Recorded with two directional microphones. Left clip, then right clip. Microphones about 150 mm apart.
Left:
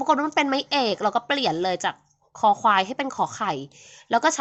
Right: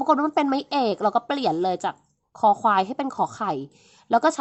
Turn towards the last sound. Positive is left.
turn(degrees=-40)  # may be behind; listen again after turning